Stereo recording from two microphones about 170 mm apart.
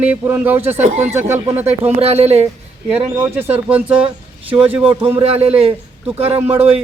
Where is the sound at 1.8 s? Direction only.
35° right (ahead or behind).